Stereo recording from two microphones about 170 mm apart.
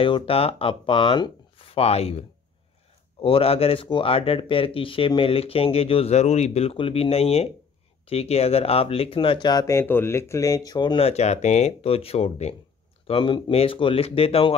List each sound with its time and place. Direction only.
0.0 s speech: 35° left (ahead or behind)
11.1 s speech: 40° left (ahead or behind)